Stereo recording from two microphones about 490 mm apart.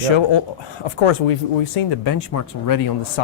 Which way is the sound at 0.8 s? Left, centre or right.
Left.